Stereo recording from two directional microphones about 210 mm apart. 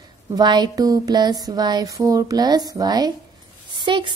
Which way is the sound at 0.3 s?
20° right (ahead or behind).